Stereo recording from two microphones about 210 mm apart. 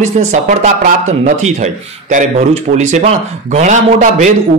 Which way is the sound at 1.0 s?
35° right (ahead or behind).